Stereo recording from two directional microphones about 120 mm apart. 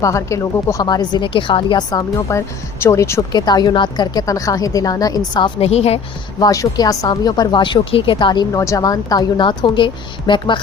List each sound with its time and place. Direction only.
0.0 s speech: 25° left (ahead or behind)
5.5 s a woman's voice: 55° left (ahead or behind)
6.4 s speech: 30° left (ahead or behind)